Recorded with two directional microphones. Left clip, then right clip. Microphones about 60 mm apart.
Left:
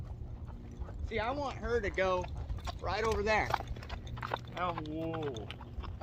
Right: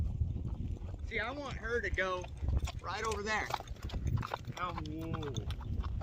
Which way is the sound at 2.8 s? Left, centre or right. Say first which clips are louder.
Left 5 dB; right.